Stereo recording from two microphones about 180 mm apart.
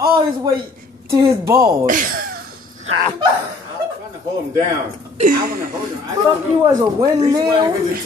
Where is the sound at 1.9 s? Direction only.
50° right (ahead or behind).